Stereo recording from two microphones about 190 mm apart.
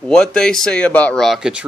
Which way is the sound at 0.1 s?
5° left (ahead or behind).